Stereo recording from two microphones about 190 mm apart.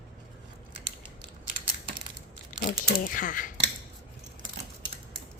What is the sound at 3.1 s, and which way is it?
Speech, 45° left (ahead or behind).